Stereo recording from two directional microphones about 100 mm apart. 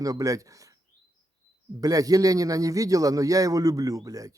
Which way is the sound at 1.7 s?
35° right (ahead or behind).